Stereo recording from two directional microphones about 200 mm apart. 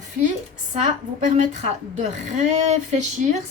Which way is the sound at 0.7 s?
35° right (ahead or behind).